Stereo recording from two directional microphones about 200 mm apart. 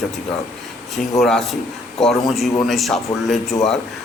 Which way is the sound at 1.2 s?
Centre (ahead or behind).